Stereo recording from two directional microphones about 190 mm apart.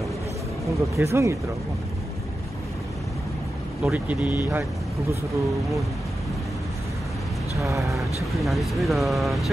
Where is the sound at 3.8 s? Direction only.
5° right (ahead or behind).